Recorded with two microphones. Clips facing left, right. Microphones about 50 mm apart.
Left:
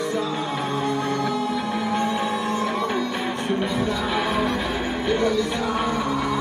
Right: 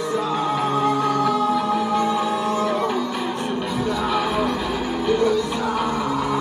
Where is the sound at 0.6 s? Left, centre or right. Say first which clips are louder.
Right 4 dB; right.